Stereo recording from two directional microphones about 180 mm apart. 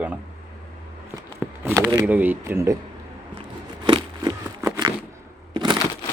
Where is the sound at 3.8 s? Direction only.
25° right (ahead or behind).